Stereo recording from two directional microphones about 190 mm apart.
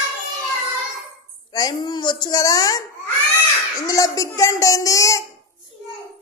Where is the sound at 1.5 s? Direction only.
20° left (ahead or behind).